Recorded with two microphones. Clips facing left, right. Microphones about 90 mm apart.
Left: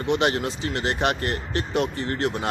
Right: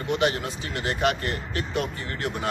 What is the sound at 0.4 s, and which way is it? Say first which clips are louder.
Speech: left 4 dB; 25° left (ahead or behind).